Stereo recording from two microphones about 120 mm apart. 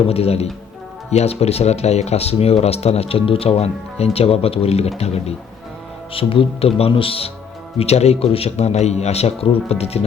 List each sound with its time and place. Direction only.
0.1 s speech: 60° left (ahead or behind)
6.1 s speech: 50° left (ahead or behind)
7.8 s speech: 60° left (ahead or behind)